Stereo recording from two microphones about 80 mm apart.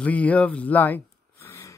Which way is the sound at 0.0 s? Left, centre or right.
Centre.